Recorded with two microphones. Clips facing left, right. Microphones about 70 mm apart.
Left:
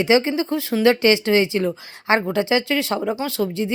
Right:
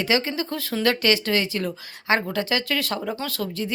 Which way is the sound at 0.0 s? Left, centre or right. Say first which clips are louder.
Left 6 dB; left.